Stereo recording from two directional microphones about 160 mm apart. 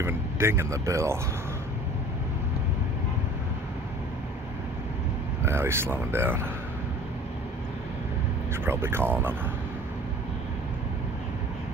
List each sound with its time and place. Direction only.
0.0 s speech: 15° right (ahead or behind)
5.4 s speech: 15° right (ahead or behind)
8.6 s speech: 15° right (ahead or behind)